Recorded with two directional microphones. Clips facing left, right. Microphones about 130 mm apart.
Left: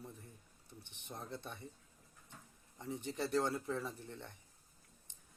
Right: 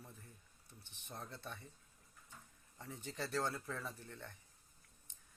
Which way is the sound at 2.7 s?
20° left (ahead or behind).